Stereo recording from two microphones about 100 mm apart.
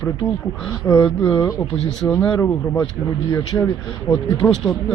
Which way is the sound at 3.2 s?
40° left (ahead or behind).